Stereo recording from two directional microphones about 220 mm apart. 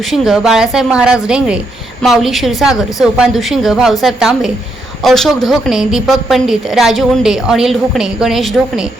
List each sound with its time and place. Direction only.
0.1 s a woman's voice: centre (ahead or behind)